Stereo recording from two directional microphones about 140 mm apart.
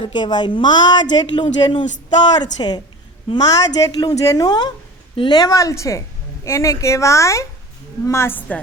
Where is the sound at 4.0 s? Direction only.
25° left (ahead or behind); by 8.6 s 10° left (ahead or behind).